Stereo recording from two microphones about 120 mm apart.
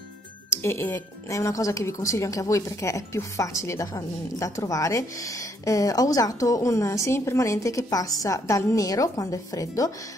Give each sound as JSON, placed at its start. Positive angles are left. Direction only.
{"t": 0.5, "sound": "speech", "side_deg": 20}